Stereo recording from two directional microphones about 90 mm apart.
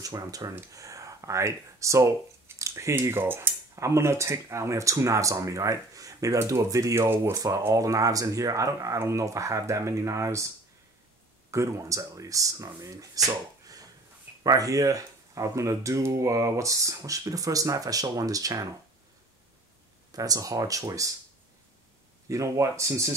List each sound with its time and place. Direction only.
0.0 s speech: 40° right (ahead or behind)
11.5 s speech: 35° right (ahead or behind)
20.1 s speech: 40° right (ahead or behind)
22.3 s speech: 35° right (ahead or behind)